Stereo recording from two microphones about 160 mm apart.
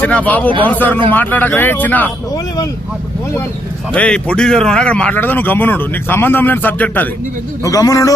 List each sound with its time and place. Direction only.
0.0 s speech: 10° left (ahead or behind)
3.9 s speech: 5° left (ahead or behind)
7.6 s a man's voice: 20° left (ahead or behind)